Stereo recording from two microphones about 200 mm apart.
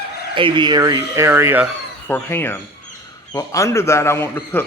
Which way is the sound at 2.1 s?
10° left (ahead or behind).